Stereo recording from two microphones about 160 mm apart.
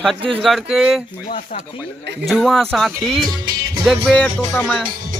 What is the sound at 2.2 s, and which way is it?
Speech, centre (ahead or behind).